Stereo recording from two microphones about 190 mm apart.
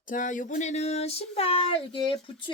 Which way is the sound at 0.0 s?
45° left (ahead or behind).